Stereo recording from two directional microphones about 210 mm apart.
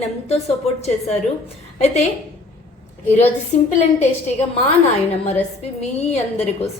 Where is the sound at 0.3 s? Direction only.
30° left (ahead or behind).